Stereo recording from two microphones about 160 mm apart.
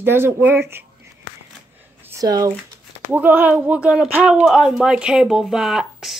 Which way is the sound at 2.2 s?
25° right (ahead or behind).